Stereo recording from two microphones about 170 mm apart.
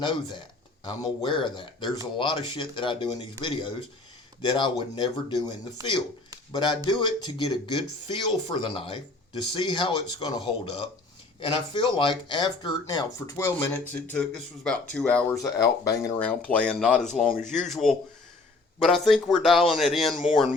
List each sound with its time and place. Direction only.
0.0 s speech: 25° left (ahead or behind)
6.5 s speech: 25° left (ahead or behind); by 15.4 s 5° left (ahead or behind)
15.4 s speech: 20° left (ahead or behind); by 20.5 s centre (ahead or behind)